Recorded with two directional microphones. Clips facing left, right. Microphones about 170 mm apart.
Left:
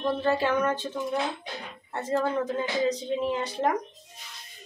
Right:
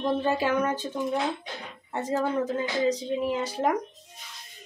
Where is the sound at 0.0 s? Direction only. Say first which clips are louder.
Even; 15° right (ahead or behind).